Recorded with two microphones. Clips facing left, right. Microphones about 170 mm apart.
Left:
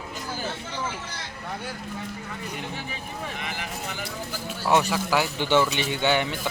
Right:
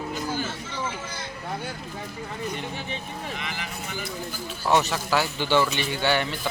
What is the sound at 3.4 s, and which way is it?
Vehicle, 50° left (ahead or behind).